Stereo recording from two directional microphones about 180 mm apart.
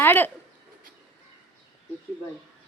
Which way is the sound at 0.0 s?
10° left (ahead or behind).